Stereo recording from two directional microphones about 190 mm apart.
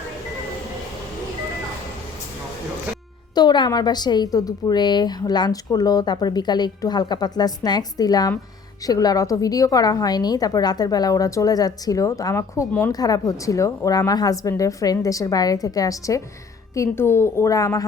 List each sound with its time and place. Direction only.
3.3 s a woman's voice: 20° left (ahead or behind)